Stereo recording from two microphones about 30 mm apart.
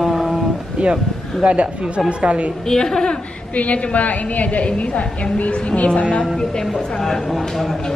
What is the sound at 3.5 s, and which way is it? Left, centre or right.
A woman's voice, left.